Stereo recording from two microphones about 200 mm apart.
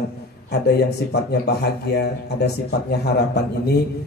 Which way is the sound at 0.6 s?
55° left (ahead or behind).